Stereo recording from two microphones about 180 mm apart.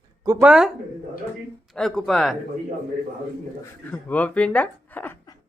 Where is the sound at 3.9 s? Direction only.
10° left (ahead or behind).